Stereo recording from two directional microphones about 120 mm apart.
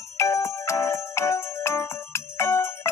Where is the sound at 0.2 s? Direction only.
25° left (ahead or behind).